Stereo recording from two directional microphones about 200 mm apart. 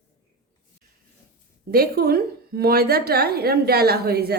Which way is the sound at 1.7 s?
50° right (ahead or behind).